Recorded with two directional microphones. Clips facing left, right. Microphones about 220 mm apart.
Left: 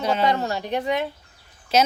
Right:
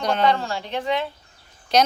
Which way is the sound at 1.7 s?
5° left (ahead or behind).